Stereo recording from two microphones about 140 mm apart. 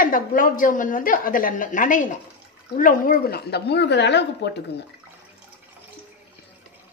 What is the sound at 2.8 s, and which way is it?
Speech, 80° left.